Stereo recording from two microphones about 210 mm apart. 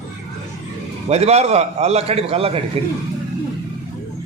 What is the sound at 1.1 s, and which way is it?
A man's voice, 30° right (ahead or behind).